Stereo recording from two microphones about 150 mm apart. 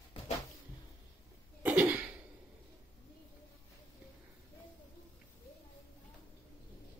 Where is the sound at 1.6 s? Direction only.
10° right (ahead or behind).